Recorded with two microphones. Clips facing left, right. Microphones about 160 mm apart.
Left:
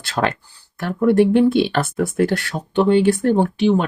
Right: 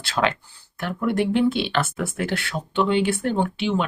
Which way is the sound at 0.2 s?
45° left (ahead or behind).